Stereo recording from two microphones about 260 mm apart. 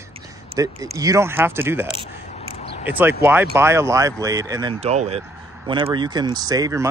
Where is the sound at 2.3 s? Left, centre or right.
Left.